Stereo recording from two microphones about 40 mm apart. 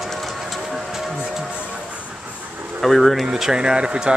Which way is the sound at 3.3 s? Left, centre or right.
Centre.